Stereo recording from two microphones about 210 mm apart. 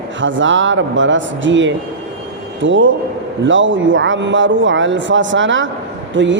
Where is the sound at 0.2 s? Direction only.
65° right (ahead or behind).